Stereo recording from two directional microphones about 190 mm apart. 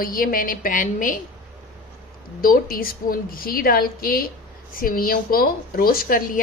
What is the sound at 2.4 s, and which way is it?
A woman's voice, 50° left (ahead or behind).